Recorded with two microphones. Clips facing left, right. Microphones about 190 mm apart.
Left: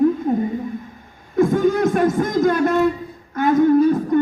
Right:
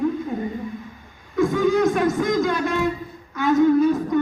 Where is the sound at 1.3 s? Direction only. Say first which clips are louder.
Left 2 dB; 50° left (ahead or behind).